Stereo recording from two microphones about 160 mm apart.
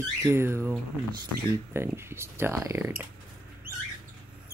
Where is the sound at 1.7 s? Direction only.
15° right (ahead or behind).